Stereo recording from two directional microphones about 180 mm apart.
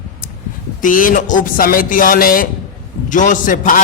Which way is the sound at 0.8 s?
50° left (ahead or behind).